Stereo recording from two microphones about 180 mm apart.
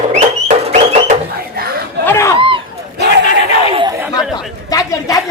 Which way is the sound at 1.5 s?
55° right (ahead or behind).